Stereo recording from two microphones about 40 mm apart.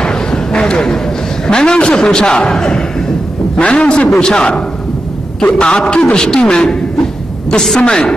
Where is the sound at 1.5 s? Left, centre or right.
Left.